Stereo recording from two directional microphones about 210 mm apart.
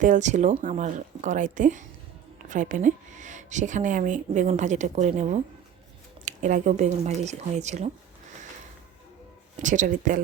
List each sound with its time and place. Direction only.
0.0 s speech: 35° right (ahead or behind)
9.6 s speech: 35° right (ahead or behind)